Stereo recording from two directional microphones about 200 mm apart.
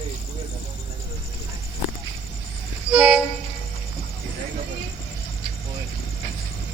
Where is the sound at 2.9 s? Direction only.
5° right (ahead or behind).